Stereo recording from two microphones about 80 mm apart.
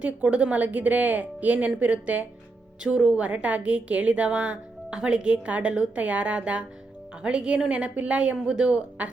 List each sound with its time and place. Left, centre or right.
0.0 s a woman's voice: centre